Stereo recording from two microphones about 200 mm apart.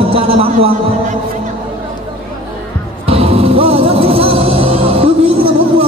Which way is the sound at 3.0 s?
30° right (ahead or behind).